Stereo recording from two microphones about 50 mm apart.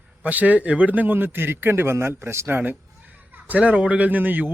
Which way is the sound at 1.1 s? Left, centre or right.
Right.